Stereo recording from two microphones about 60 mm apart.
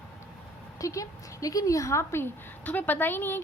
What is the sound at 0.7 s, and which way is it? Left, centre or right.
A woman's voice, left.